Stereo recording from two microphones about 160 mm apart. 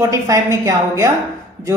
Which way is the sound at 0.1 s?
20° right (ahead or behind).